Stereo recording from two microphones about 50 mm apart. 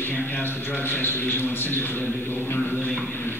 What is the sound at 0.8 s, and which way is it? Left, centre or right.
A man's voice, left.